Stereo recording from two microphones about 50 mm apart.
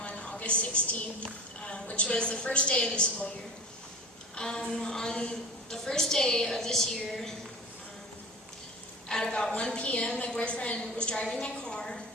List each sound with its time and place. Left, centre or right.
0.0 s a sound: left
1.2 s a woman's voice: left
4.4 s a woman's voice: centre
9.0 s a woman's voice: centre